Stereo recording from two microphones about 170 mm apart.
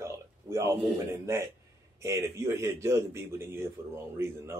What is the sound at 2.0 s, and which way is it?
A man's voice, 15° right (ahead or behind).